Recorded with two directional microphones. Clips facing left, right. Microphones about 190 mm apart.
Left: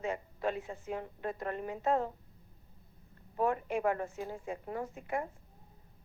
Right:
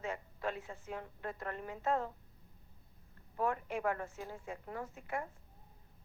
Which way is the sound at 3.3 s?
20° left (ahead or behind).